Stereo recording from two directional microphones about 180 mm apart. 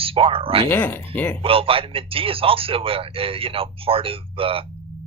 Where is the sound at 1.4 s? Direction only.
30° right (ahead or behind).